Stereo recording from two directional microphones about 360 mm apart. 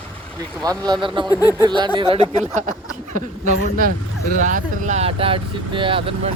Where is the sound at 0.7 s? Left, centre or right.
Centre.